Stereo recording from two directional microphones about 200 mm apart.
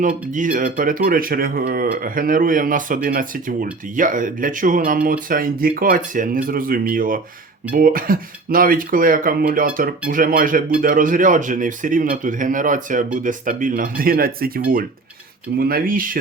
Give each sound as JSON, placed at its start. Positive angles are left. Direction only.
{"t": 0.0, "sound": "speech", "side_deg": -40}